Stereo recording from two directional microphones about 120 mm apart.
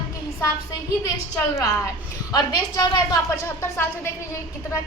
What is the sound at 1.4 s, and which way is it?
Speech, 20° left (ahead or behind).